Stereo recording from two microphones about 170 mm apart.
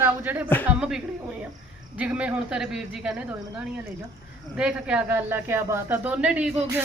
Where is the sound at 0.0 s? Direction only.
10° right (ahead or behind).